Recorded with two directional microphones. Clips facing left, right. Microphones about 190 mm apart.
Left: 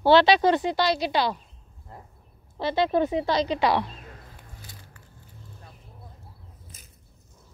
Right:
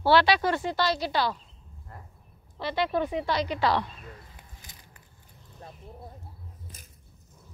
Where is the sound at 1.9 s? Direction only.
25° left (ahead or behind).